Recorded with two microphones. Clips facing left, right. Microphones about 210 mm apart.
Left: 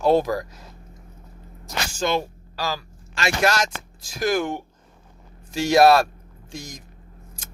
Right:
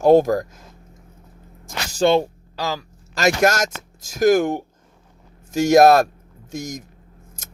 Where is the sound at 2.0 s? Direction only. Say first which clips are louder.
Right 8 dB; 30° right (ahead or behind).